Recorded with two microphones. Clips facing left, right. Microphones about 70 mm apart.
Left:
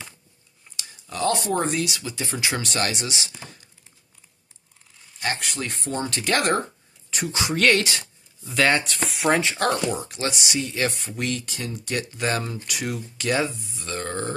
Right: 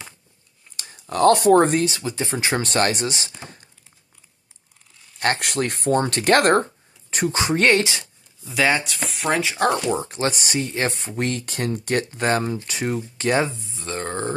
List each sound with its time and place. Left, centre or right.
0.7 s speech: right
1.8 s speech: right
5.2 s speech: right
8.0 s speech: centre
9.6 s speech: right
11.5 s speech: right